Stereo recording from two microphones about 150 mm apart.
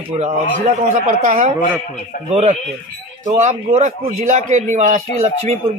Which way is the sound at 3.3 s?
50° right (ahead or behind).